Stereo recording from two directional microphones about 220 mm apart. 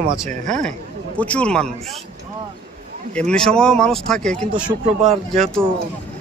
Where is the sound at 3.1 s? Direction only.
5° left (ahead or behind).